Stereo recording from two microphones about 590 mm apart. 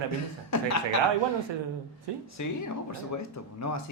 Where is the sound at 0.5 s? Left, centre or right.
Left.